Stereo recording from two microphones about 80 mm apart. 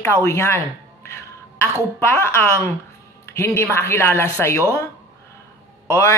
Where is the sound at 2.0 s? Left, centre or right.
Left.